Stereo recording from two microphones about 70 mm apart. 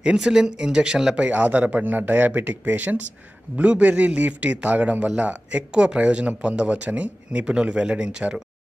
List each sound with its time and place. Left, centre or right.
0.0 s a man's voice: centre